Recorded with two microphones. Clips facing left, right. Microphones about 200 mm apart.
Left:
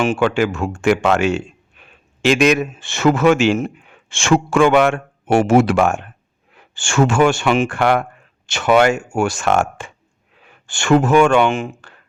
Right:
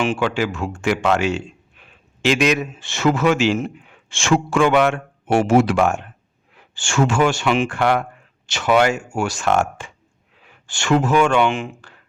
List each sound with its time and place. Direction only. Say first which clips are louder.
0.0 s speech: left 4 dB; 50° left (ahead or behind)
7.8 s speech: left 2 dB; 70° left (ahead or behind)
8.4 s speech: left 3 dB; 50° left (ahead or behind)